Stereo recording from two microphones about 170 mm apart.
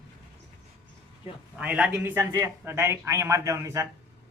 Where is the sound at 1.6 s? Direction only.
5° right (ahead or behind).